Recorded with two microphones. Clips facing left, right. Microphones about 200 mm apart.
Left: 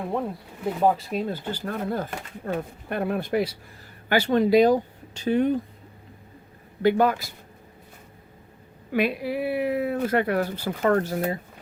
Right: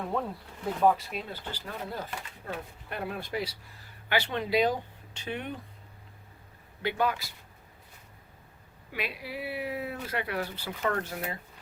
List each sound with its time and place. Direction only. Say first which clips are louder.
0.8 s speech: left 2 dB; 30° left (ahead or behind)
1.3 s speech: left 9 dB; 50° left (ahead or behind)
4.1 s speech: left 9 dB; 45° left (ahead or behind)
6.8 s speech: left 9 dB; 45° left (ahead or behind)
8.9 s speech: left 12 dB; 50° left (ahead or behind)